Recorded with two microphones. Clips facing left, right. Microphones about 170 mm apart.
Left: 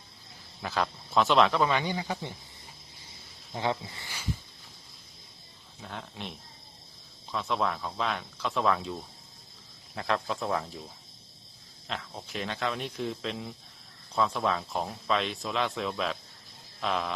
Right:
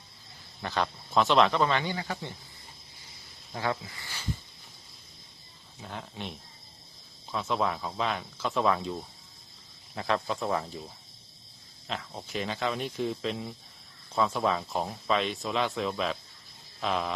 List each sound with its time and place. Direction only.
0.6 s speech: centre (ahead or behind)
1.7 s speech: 20° left (ahead or behind)
3.5 s speech: 20° left (ahead or behind)
5.8 s speech: centre (ahead or behind)
11.9 s speech: centre (ahead or behind)